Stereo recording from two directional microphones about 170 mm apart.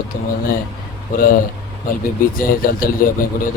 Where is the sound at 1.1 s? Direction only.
55° left (ahead or behind).